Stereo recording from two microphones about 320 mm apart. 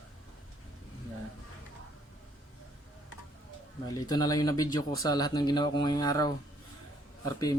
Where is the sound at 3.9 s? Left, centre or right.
Centre.